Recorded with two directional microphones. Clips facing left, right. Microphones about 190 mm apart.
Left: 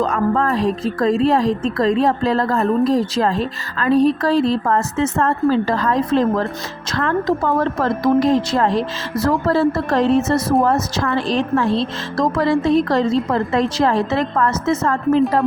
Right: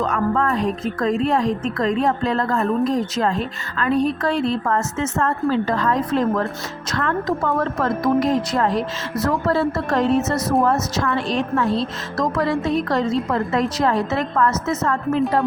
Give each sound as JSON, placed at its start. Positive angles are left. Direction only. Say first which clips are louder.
{"t": 0.0, "sound": "speech", "louder": "left 2 dB", "side_deg": 30}